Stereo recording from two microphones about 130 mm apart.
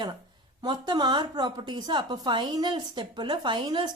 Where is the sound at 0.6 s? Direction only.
35° right (ahead or behind).